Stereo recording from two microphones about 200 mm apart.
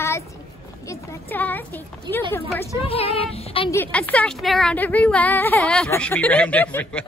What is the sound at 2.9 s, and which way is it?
Speech, 30° left (ahead or behind).